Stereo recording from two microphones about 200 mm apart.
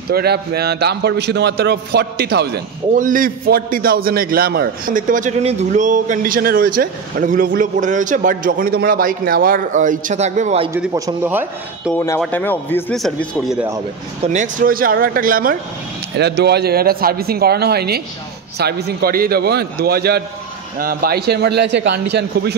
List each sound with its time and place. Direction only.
0.1 s a man's voice: 50° right (ahead or behind); by 10.7 s 35° right (ahead or behind)
10.7 s speech: 15° right (ahead or behind)
12.2 s a man's voice: 10° left (ahead or behind)
14.2 s a man's voice: 40° right (ahead or behind)
16.2 s a man's voice: 55° right (ahead or behind)